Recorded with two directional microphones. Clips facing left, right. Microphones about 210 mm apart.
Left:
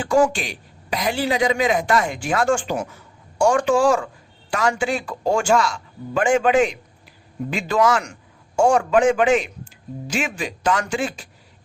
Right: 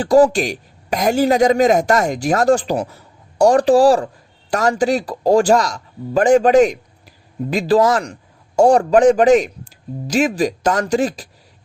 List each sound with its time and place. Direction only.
0.0 s a woman's voice: 35° right (ahead or behind)